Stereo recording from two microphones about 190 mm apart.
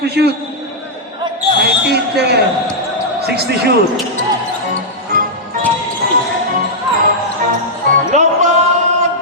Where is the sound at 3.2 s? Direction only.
60° right (ahead or behind).